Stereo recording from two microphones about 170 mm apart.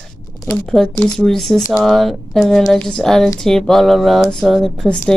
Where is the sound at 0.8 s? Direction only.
Centre (ahead or behind).